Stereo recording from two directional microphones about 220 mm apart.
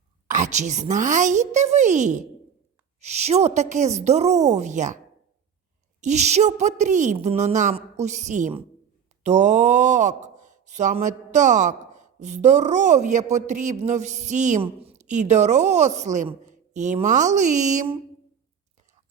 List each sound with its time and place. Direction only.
0.3 s speech: 35° right (ahead or behind)
6.0 s speech: 30° right (ahead or behind)